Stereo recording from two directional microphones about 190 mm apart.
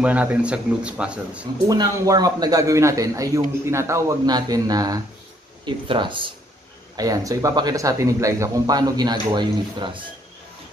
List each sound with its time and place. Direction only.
0.0 s a man's voice: 10° right (ahead or behind)
1.7 s a man's voice: 20° right (ahead or behind)